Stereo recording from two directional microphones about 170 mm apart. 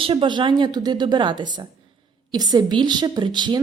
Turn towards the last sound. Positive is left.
turn(degrees=-25)  # may be behind; listen again after turning